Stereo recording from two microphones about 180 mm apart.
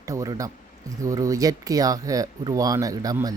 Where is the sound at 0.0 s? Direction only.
20° right (ahead or behind).